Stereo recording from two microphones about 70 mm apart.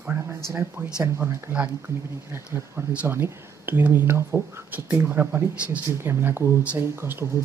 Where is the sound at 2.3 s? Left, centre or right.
Right; by 5.8 s centre.